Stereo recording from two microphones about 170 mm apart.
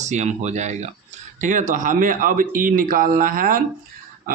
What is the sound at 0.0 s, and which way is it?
A man's voice, 45° right (ahead or behind).